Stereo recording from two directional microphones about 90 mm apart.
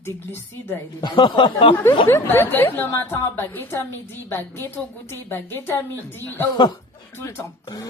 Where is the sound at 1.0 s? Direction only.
55° left (ahead or behind).